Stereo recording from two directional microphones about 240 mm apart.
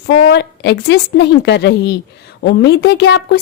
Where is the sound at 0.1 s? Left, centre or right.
Left.